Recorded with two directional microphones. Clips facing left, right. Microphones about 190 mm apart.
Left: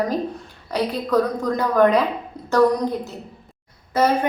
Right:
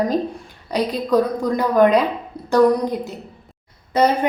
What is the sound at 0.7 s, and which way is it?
A woman's voice, 10° right (ahead or behind).